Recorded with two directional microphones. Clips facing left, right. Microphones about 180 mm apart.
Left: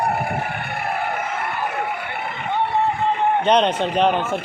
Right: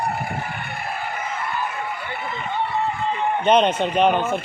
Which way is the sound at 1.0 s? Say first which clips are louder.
Left 3 dB; 60° left (ahead or behind).